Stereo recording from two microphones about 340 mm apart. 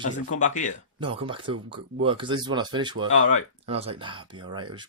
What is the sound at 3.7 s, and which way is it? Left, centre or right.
Speech, centre.